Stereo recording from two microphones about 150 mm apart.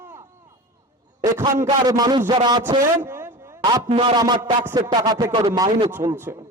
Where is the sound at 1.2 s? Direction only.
20° right (ahead or behind).